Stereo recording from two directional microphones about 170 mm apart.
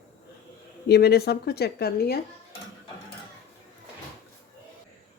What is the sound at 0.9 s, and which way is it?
A woman's voice, 70° left (ahead or behind).